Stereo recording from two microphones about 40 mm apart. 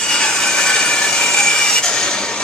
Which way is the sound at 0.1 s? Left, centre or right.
Left.